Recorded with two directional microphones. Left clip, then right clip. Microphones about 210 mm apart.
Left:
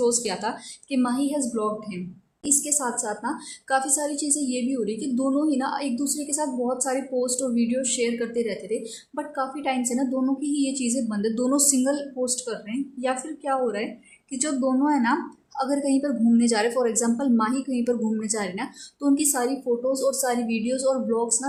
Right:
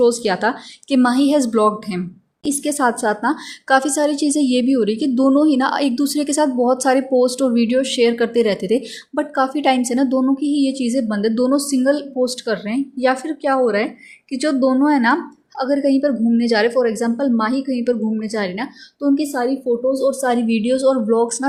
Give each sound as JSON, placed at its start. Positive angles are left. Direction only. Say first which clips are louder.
{"t": 0.0, "sound": "a woman's voice", "louder": "right 8 dB", "side_deg": -30}
{"t": 15.6, "sound": "a woman's voice", "louder": "right 8 dB", "side_deg": -15}